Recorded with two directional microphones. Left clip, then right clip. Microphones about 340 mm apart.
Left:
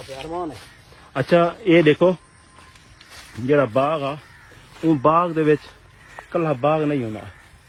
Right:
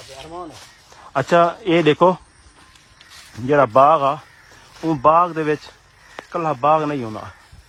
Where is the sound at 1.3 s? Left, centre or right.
Centre.